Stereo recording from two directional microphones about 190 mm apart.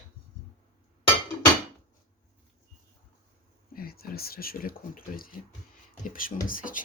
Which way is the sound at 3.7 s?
50° left (ahead or behind).